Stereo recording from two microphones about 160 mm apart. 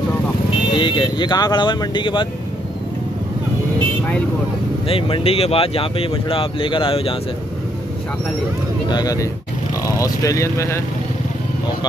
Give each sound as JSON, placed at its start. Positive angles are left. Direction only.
{"t": 0.7, "sound": "speech", "side_deg": 30}
{"t": 4.8, "sound": "speech", "side_deg": 35}
{"t": 8.8, "sound": "speech", "side_deg": 25}